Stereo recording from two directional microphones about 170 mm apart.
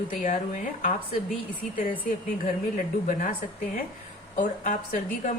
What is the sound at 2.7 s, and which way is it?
Speech, 50° left (ahead or behind).